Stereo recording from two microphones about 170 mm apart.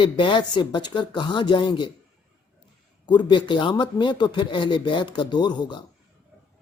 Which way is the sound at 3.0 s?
25° left (ahead or behind).